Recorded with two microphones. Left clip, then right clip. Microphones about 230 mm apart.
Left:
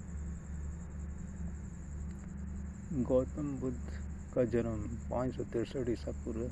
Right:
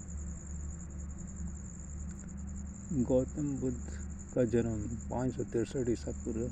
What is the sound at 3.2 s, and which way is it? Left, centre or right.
Speech, right.